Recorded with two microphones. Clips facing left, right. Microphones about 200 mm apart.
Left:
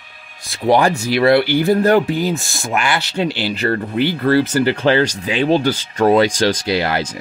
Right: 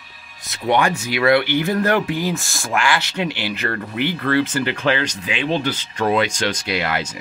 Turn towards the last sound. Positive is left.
turn(degrees=30)  # may be behind; listen again after turning